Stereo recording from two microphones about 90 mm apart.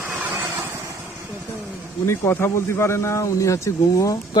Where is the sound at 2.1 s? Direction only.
30° left (ahead or behind).